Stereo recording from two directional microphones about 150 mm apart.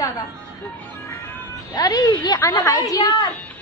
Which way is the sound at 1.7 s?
25° left (ahead or behind).